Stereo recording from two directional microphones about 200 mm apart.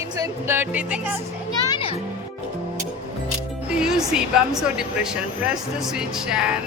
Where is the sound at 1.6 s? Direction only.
25° left (ahead or behind).